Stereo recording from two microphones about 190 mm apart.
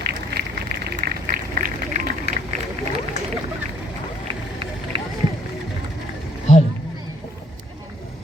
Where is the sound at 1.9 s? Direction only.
35° right (ahead or behind).